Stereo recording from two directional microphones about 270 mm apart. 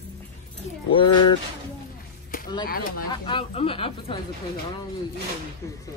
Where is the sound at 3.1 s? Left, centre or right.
Centre.